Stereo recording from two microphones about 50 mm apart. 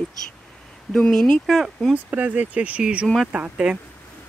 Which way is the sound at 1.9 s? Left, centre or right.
Right.